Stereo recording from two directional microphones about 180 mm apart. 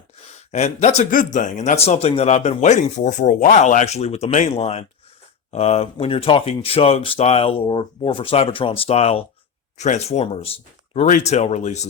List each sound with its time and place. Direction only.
0.5 s speech: 40° left (ahead or behind)